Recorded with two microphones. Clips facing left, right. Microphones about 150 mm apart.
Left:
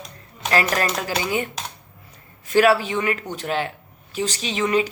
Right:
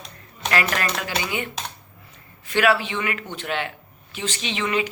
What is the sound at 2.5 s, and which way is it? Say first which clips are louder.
A woman's voice: left 4 dB; 40° left (ahead or behind).